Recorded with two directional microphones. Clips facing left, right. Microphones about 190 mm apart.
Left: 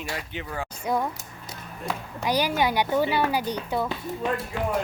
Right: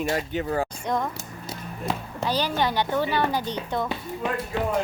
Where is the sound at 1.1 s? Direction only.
25° right (ahead or behind).